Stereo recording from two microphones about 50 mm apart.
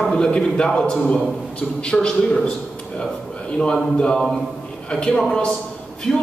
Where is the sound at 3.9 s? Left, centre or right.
Centre.